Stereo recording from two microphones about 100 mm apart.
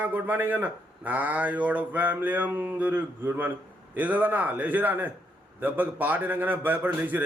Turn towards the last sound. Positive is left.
turn(degrees=-15)  # may be behind; listen again after turning